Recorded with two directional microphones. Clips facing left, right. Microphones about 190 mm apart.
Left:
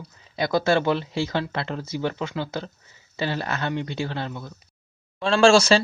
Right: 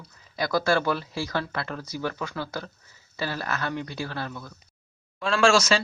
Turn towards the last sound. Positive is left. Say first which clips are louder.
# left 5 dB
turn(degrees=30)  # may be behind; listen again after turning